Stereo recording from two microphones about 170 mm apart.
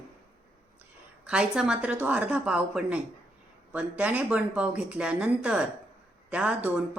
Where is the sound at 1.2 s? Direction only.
5° right (ahead or behind).